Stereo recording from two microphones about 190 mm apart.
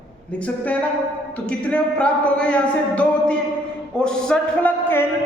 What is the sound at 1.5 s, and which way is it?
A woman's voice, 5° left (ahead or behind).